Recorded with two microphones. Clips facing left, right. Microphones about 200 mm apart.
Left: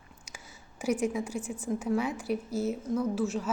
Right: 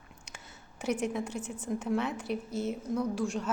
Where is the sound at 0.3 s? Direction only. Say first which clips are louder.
Left 1 dB; 10° left (ahead or behind).